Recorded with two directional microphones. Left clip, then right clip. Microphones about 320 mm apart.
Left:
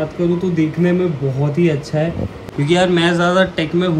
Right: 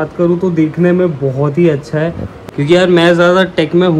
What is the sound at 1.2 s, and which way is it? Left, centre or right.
Speech, centre.